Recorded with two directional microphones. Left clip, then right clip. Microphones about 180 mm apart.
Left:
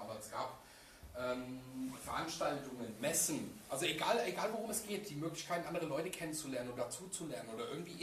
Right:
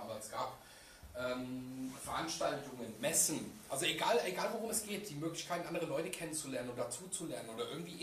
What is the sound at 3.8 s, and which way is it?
Speech, 15° right (ahead or behind).